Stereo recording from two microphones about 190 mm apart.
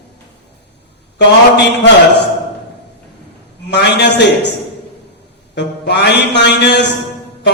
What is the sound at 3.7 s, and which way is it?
Speech, 60° left (ahead or behind).